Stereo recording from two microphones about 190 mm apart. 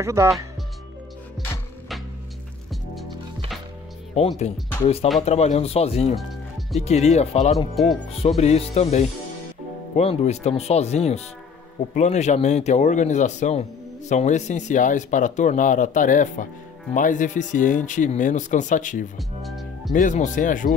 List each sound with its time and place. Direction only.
0.0 s speech: 15° right (ahead or behind)
2.7 s music: centre (ahead or behind)
4.2 s speech: 35° left (ahead or behind)
7.8 s speech: centre (ahead or behind)
8.4 s speech: 35° left (ahead or behind)
9.9 s speech: 35° left (ahead or behind)
19.4 s music: centre (ahead or behind)
19.9 s speech: 40° left (ahead or behind)